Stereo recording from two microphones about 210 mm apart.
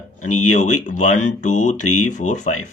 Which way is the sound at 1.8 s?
90° left.